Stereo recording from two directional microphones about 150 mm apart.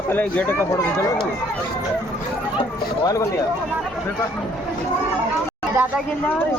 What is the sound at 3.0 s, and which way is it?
Speech, 25° left (ahead or behind).